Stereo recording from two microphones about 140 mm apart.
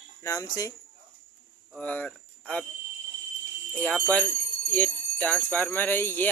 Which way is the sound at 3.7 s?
10° left (ahead or behind).